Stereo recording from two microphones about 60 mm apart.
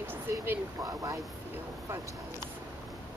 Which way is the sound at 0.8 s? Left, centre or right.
Right.